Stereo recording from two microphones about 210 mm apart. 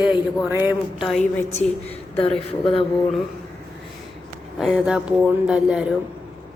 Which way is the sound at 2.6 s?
25° left (ahead or behind).